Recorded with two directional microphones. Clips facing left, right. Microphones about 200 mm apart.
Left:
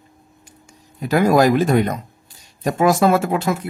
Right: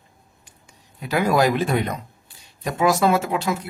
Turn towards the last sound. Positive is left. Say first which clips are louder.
# left 4 dB
turn(degrees=50)  # may be behind; listen again after turning